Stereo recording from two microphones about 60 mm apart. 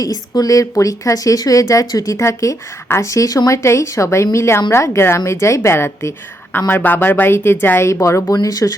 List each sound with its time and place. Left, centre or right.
0.0 s speech: left
6.7 s speech: left
7.9 s speech: left
8.3 s speech: left